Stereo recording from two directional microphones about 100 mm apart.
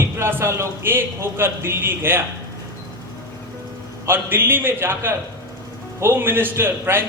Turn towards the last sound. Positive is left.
turn(degrees=-25)  # may be behind; listen again after turning